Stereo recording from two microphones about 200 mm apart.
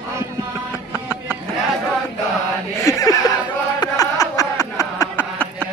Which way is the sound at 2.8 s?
15° left (ahead or behind).